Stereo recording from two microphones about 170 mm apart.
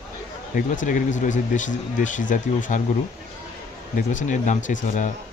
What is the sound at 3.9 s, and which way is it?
Speech, 50° left (ahead or behind).